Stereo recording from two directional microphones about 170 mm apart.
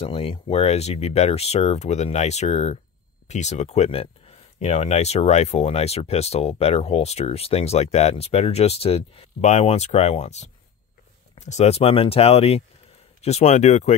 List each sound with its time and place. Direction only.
0.0 s speech: 35° left (ahead or behind)